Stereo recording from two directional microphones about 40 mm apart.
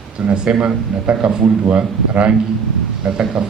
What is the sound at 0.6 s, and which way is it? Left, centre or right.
A man's voice, right.